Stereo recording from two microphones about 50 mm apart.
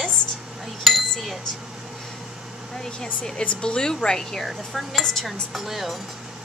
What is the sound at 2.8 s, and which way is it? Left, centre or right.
A woman's voice, centre.